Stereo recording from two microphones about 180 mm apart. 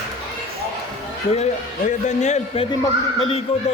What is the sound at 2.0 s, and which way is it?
Speech, 40° left (ahead or behind).